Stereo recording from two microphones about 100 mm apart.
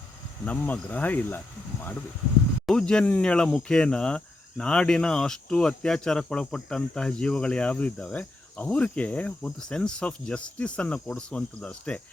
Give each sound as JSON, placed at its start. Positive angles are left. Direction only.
{"t": 0.4, "sound": "speech", "side_deg": 15}
{"t": 2.6, "sound": "speech", "side_deg": 5}